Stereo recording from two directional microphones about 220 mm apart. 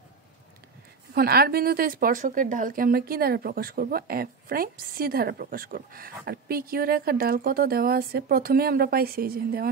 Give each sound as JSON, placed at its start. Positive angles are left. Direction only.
{"t": 1.1, "sound": "a woman's voice", "side_deg": -45}